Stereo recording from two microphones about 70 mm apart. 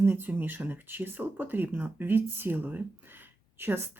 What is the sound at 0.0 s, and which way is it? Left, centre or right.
Speech, right.